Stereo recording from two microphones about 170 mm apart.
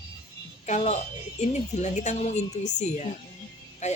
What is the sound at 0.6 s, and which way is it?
A woman's voice, 40° left (ahead or behind).